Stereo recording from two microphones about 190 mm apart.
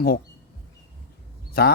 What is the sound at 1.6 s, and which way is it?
Speech, 55° left (ahead or behind).